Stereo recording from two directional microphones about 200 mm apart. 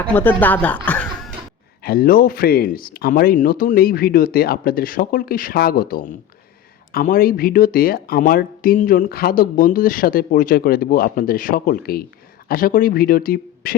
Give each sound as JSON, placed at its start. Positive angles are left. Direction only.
{"t": 0.0, "sound": "speech", "side_deg": 10}
{"t": 0.9, "sound": "a sound", "side_deg": 5}
{"t": 1.8, "sound": "speech", "side_deg": 50}